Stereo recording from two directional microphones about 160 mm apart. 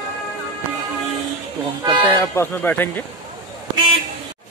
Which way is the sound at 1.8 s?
30° right (ahead or behind).